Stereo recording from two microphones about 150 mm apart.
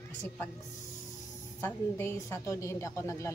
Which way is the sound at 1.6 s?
15° left (ahead or behind).